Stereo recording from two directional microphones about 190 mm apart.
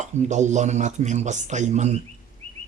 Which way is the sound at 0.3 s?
40° right (ahead or behind).